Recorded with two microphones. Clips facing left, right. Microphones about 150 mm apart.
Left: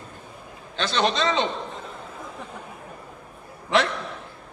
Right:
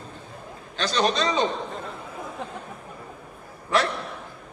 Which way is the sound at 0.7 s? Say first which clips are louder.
Even; 40° right (ahead or behind).